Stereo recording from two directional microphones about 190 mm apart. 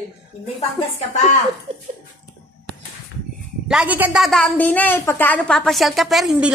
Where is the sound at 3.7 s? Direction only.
5° right (ahead or behind).